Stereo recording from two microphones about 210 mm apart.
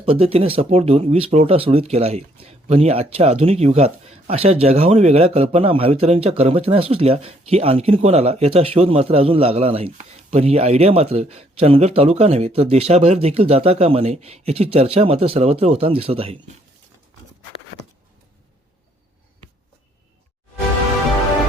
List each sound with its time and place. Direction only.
0.0 s speech: 25° right (ahead or behind)